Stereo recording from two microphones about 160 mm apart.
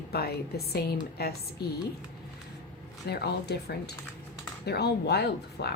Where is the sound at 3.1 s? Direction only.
90° left.